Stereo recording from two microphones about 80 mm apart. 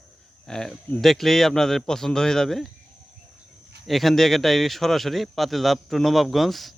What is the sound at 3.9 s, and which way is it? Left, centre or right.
A man's voice, centre.